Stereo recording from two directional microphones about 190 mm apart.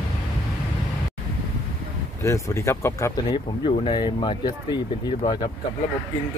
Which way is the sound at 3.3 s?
25° left (ahead or behind).